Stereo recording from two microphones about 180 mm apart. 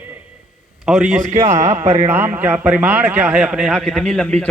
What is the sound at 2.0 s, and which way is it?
A man's voice, 10° right (ahead or behind).